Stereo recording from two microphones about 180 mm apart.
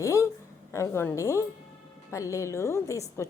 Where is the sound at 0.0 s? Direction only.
15° left (ahead or behind).